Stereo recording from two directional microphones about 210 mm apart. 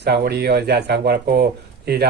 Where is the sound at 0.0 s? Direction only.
50° right (ahead or behind).